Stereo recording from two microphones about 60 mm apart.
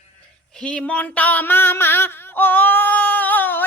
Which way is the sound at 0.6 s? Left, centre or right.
Left.